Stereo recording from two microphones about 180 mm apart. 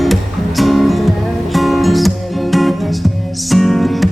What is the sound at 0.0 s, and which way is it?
Music, centre (ahead or behind).